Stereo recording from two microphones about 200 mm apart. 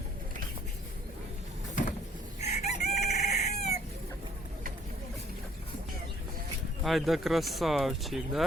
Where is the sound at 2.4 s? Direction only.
35° left (ahead or behind).